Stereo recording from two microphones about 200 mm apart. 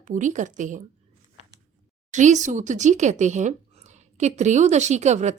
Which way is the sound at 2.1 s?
40° right (ahead or behind).